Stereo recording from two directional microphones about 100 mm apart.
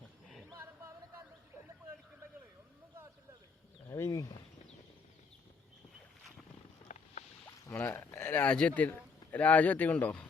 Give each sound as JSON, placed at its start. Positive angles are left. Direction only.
{"t": 0.5, "sound": "music", "side_deg": -25}
{"t": 3.8, "sound": "a sound", "side_deg": 25}
{"t": 7.7, "sound": "a man's voice", "side_deg": 20}